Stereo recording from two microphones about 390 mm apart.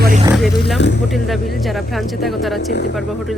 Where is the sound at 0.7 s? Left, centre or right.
Left.